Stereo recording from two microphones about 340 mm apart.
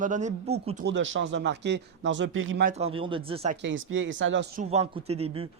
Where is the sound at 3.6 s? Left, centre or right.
Right.